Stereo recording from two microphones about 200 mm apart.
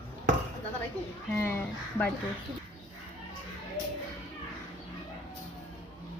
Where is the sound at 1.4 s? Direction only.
10° left (ahead or behind).